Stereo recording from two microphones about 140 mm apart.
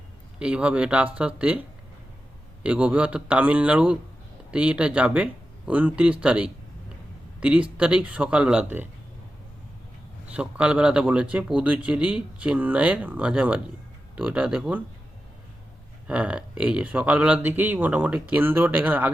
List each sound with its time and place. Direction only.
0.3 s speech: 10° right (ahead or behind)
2.6 s speech: 10° right (ahead or behind)
10.2 s speech: 10° right (ahead or behind)
16.0 s speech: 10° right (ahead or behind)